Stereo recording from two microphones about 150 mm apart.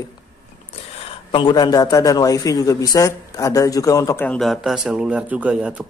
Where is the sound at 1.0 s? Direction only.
35° left (ahead or behind); by 4.3 s 15° left (ahead or behind).